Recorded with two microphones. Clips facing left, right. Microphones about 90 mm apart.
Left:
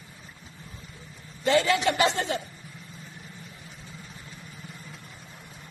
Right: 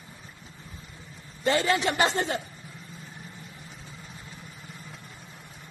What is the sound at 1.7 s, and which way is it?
Speech, 35° right (ahead or behind).